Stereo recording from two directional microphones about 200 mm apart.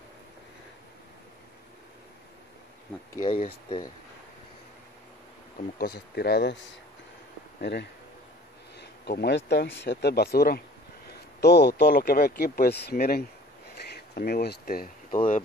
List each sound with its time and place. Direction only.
3.3 s speech: 25° left (ahead or behind)
5.8 s a man's voice: 50° left (ahead or behind)
13.7 s a sound: 55° left (ahead or behind)